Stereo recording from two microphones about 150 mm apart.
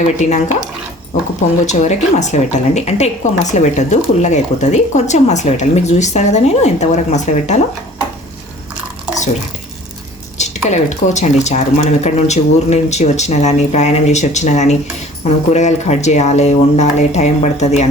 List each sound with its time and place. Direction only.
0.0 s speech: 55° left (ahead or behind)
1.6 s speech: 50° left (ahead or behind)
10.3 s speech: 50° left (ahead or behind)